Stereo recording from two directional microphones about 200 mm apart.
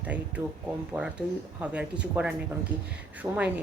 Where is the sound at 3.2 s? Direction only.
15° right (ahead or behind).